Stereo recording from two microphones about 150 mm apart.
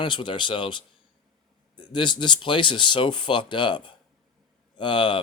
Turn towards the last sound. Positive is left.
turn(degrees=30)  # may be behind; listen again after turning